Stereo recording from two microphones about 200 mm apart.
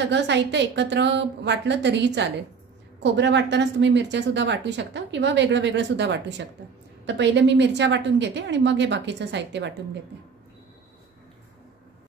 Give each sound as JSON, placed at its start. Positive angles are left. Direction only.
{"t": 0.1, "sound": "a woman's voice", "side_deg": -60}